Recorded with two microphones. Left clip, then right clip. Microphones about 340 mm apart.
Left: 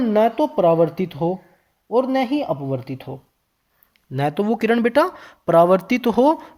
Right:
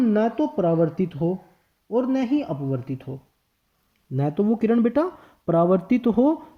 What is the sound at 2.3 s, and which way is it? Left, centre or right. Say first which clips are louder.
Speech: left 3 dB; left.